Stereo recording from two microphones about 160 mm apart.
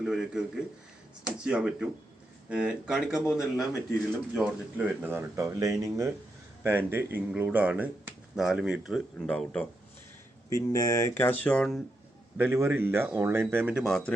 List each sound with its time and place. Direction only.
0.0 s speech: 5° right (ahead or behind)
10.5 s speech: 20° left (ahead or behind); by 11.8 s 5° left (ahead or behind)
12.4 s speech: 15° right (ahead or behind)
13.8 s speech: 5° left (ahead or behind)